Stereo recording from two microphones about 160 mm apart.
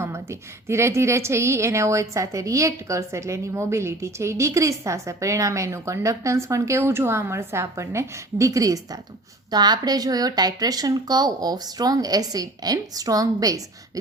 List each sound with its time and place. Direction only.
0.0 s a woman's voice: 15° right (ahead or behind)